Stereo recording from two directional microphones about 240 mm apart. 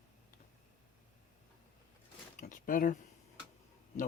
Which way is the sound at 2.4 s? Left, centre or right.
Left.